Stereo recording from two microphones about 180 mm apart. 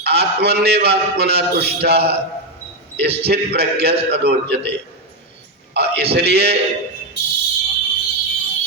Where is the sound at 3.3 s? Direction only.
60° right (ahead or behind).